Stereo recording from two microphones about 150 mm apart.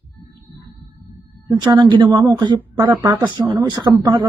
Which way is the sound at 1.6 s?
25° right (ahead or behind).